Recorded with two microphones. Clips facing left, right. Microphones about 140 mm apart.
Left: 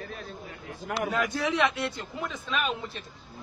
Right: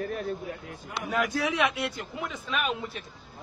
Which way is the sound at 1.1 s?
5° right (ahead or behind).